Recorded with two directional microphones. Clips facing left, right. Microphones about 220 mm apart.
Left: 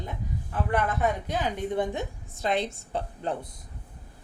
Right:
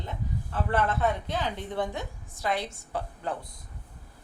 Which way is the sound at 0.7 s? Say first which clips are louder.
Even; 15° left (ahead or behind).